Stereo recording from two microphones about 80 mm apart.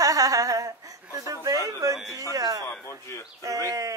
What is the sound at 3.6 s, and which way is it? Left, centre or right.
Speech, right.